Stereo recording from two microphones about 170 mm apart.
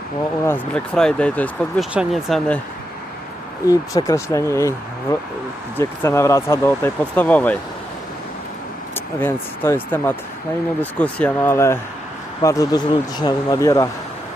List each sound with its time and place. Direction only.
0.4 s speech: 10° left (ahead or behind)
3.7 s speech: 20° left (ahead or behind)
5.7 s speech: 15° left (ahead or behind)
9.0 s speech: 10° left (ahead or behind)